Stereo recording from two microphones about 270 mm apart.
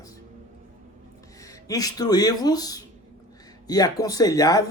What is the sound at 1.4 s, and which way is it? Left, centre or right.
Speech, centre.